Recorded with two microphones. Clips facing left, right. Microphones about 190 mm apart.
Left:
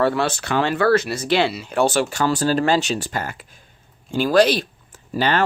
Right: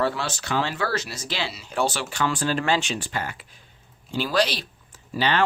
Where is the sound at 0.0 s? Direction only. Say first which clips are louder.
Left 6 dB; 60° left (ahead or behind).